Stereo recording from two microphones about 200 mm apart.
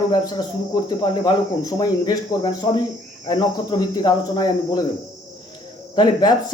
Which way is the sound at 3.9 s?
20° left (ahead or behind).